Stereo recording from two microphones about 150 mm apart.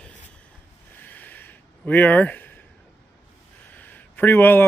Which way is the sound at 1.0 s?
10° left (ahead or behind).